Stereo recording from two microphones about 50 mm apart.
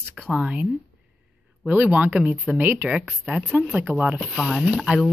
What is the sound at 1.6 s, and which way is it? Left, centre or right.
Speech, right.